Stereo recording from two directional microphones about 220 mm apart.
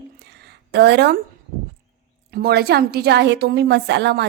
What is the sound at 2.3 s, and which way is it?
A woman's voice, 45° right (ahead or behind).